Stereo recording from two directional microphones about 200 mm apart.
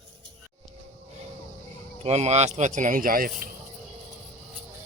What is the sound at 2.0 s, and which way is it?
Speech, 30° right (ahead or behind).